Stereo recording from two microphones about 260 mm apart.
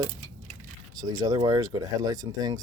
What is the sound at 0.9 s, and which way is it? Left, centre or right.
Speech, centre.